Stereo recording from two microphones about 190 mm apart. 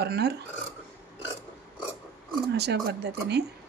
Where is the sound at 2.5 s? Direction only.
60° right (ahead or behind).